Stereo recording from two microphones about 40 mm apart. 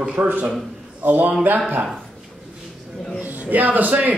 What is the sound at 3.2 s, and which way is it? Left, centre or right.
Speech, right.